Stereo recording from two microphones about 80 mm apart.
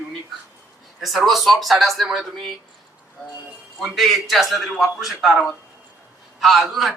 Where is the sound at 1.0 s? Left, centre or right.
Centre.